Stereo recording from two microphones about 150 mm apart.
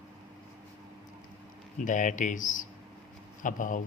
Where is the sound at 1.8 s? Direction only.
55° left (ahead or behind).